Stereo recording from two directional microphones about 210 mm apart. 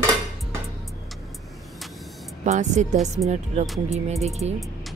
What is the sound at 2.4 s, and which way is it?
Speech, 35° right (ahead or behind).